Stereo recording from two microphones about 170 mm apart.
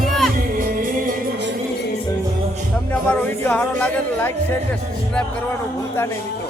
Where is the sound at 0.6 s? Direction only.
55° right (ahead or behind).